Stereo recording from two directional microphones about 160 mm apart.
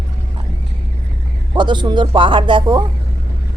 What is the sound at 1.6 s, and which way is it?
Speech, 30° right (ahead or behind).